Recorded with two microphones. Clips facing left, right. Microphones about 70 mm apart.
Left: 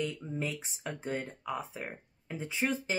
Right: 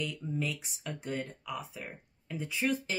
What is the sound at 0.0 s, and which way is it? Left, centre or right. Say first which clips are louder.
Speech: even; left.